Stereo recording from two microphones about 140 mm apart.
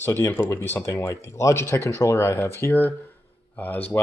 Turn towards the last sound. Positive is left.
turn(degrees=10)  # may be behind; listen again after turning